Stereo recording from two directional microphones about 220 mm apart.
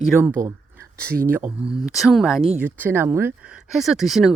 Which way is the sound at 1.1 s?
40° right (ahead or behind).